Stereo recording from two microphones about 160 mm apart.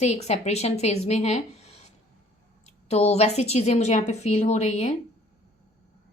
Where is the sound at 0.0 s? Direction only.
45° left (ahead or behind).